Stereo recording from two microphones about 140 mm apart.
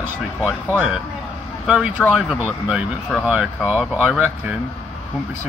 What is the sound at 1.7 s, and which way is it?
Speech, 5° right (ahead or behind).